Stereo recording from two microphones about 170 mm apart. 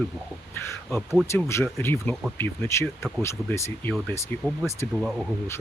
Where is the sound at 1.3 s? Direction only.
15° left (ahead or behind).